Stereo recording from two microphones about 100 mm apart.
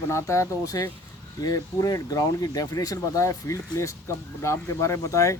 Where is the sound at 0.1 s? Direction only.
30° left (ahead or behind).